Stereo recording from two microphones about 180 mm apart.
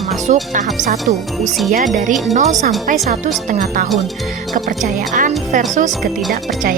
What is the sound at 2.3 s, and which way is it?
Speech, 45° right (ahead or behind).